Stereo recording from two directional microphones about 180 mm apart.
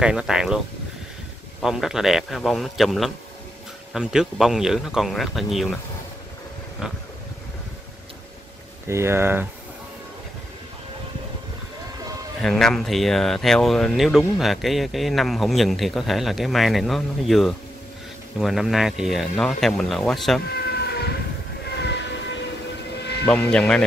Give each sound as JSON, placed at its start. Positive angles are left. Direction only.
{"t": 0.0, "sound": "speech", "side_deg": -5}
{"t": 1.6, "sound": "speech", "side_deg": 0}
{"t": 6.8, "sound": "vehicle", "side_deg": -5}
{"t": 8.8, "sound": "speech", "side_deg": -15}
{"t": 12.4, "sound": "speech", "side_deg": 5}
{"t": 20.5, "sound": "vehicle", "side_deg": 65}
{"t": 21.6, "sound": "train", "side_deg": 70}
{"t": 23.2, "sound": "speech", "side_deg": 5}